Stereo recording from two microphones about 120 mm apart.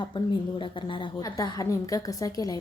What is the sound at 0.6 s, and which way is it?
Speech, 45° left (ahead or behind).